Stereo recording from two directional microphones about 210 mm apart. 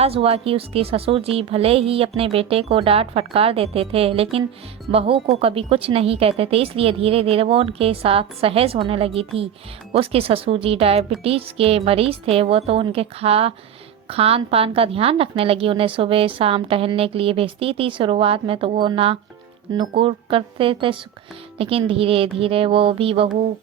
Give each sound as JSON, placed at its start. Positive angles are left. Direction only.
{"t": 0.0, "sound": "a woman's voice", "side_deg": -30}